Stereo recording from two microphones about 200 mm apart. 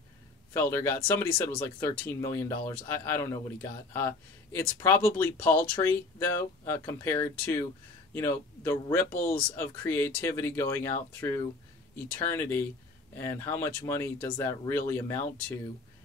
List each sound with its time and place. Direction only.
0.5 s speech: 15° left (ahead or behind)
9.1 s speech: 45° left (ahead or behind)
9.6 s speech: 10° left (ahead or behind)